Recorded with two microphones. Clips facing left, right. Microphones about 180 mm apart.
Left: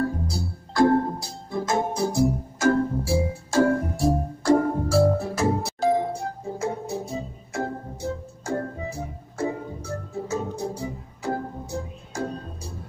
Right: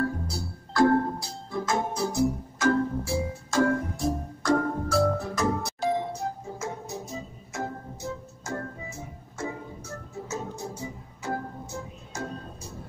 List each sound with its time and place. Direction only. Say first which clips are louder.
0.0 s music: left 3 dB; 20° left (ahead or behind)
2.1 s music: left 3 dB; 40° left (ahead or behind)